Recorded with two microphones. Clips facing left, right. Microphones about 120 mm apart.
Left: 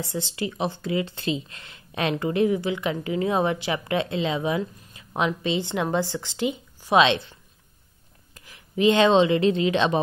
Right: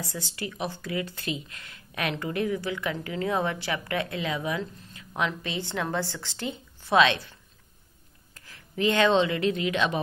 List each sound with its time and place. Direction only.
0.0 s speech: 20° left (ahead or behind)
8.4 s speech: 15° left (ahead or behind)